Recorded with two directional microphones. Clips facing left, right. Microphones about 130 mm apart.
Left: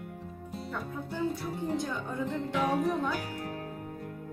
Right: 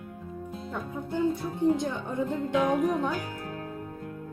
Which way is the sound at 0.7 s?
20° right (ahead or behind).